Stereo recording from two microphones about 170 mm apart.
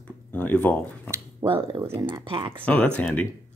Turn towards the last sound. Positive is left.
turn(degrees=10)  # may be behind; listen again after turning